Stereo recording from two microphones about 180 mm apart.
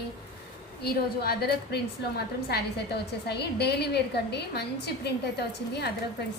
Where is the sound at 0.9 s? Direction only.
60° left (ahead or behind).